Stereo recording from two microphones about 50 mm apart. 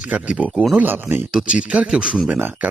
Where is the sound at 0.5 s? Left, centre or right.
Centre.